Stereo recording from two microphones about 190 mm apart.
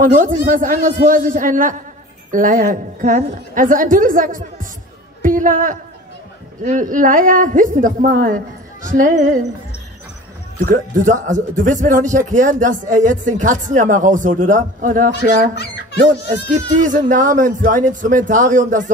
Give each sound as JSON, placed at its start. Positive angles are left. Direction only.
{"t": 0.0, "sound": "speech", "side_deg": -45}
{"t": 5.2, "sound": "a sound", "side_deg": -45}
{"t": 6.6, "sound": "speech", "side_deg": -40}
{"t": 10.6, "sound": "speech", "side_deg": -45}
{"t": 16.8, "sound": "speech", "side_deg": -45}